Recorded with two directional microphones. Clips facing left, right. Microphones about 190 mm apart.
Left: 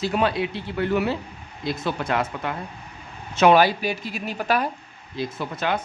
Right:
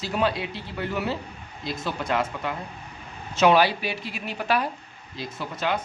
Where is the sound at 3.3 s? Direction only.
50° left (ahead or behind).